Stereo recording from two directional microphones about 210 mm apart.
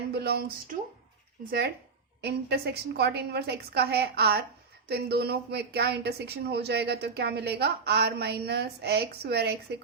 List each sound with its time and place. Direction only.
0.1 s speech: 50° right (ahead or behind)